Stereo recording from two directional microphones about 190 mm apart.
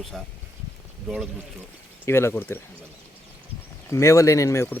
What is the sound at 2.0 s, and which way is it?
Speech, 15° left (ahead or behind).